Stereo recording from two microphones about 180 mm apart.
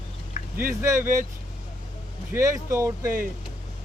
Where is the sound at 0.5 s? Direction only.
10° right (ahead or behind).